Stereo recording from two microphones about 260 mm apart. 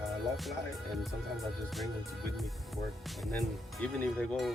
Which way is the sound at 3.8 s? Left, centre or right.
Centre.